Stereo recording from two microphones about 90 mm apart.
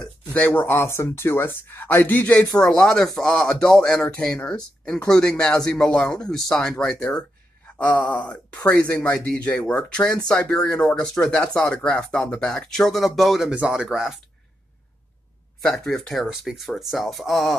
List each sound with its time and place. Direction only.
0.3 s speech: 20° left (ahead or behind)
2.4 s speech: 35° left (ahead or behind)
2.7 s speech: 10° left (ahead or behind)
15.8 s speech: 5° left (ahead or behind)